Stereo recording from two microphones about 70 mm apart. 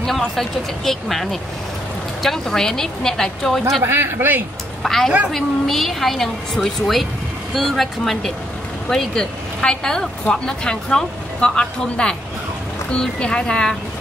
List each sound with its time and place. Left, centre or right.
0.0 s a woman's voice: centre
3.8 s speech: right
4.8 s a woman's voice: centre